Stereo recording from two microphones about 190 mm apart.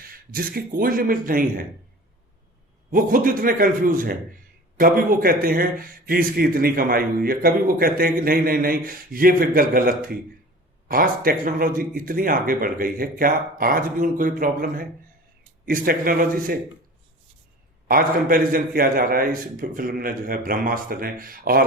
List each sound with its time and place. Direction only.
0.1 s a man's voice: 50° right (ahead or behind)
2.9 s a man's voice: 45° right (ahead or behind)
17.8 s a man's voice: 50° right (ahead or behind)